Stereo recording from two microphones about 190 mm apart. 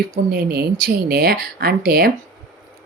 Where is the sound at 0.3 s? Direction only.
55° right (ahead or behind).